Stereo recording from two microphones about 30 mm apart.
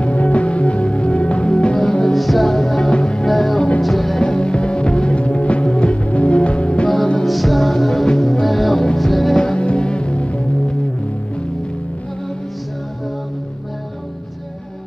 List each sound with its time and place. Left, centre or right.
0.0 s music: left
2.1 s music: centre
2.6 s music: centre
2.9 s music: left
3.3 s music: centre
4.2 s music: left
7.2 s music: centre
9.4 s music: left